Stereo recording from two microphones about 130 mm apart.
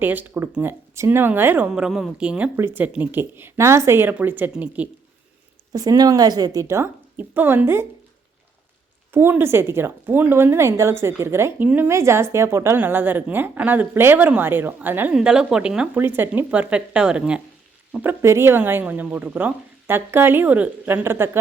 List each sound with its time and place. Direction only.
0.0 s a woman's voice: 15° right (ahead or behind)
5.7 s a woman's voice: 30° right (ahead or behind)
9.1 s a woman's voice: 15° right (ahead or behind)